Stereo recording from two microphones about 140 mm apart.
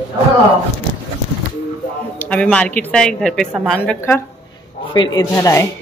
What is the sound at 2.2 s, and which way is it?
Speech, 10° left (ahead or behind).